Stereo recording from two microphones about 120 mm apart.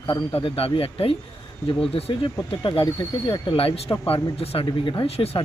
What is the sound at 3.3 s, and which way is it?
Speech, 50° left (ahead or behind).